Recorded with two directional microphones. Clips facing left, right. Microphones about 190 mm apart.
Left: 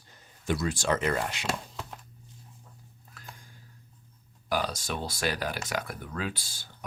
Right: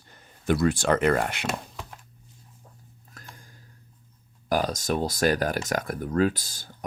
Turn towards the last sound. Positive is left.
turn(degrees=-45)  # may be behind; listen again after turning